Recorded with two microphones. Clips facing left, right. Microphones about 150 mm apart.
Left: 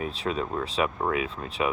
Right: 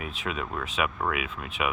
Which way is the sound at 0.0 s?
35° left (ahead or behind).